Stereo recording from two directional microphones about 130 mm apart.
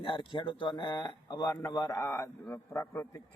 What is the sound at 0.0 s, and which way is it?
Speech, 45° left (ahead or behind).